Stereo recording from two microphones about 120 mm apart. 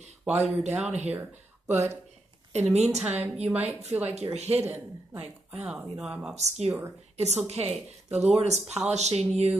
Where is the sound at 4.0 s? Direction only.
60° right (ahead or behind).